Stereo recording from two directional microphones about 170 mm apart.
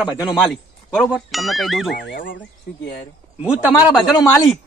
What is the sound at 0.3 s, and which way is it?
Speech, centre (ahead or behind).